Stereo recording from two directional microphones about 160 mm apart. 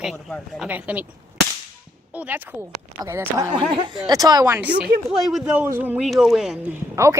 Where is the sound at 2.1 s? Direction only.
10° right (ahead or behind).